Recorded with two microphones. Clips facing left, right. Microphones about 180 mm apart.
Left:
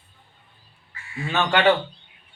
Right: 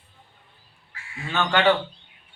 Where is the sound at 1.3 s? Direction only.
15° left (ahead or behind).